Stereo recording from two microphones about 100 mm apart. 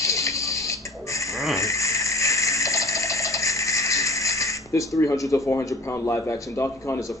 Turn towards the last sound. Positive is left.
turn(degrees=30)  # may be behind; listen again after turning